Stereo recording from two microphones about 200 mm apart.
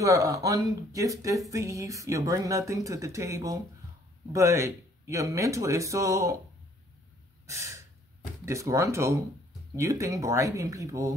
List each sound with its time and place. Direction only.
0.0 s speech: 20° right (ahead or behind)
7.4 s gasp: 15° right (ahead or behind)
8.5 s speech: 15° right (ahead or behind)